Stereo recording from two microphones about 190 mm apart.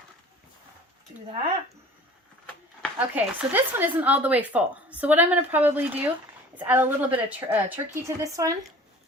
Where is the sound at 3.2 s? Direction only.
10° right (ahead or behind).